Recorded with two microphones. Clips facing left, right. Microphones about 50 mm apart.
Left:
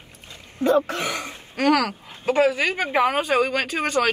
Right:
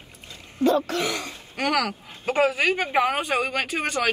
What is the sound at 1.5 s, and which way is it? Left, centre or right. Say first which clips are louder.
Speech: left 4 dB; centre.